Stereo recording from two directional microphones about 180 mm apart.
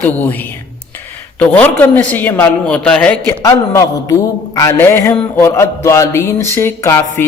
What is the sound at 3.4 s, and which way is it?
A man's voice, 20° left (ahead or behind).